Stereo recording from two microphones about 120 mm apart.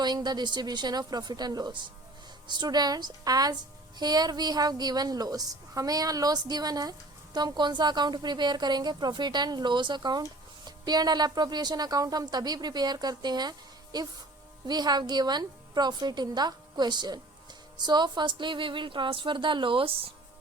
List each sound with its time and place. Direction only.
0.0 s a woman's voice: 35° right (ahead or behind)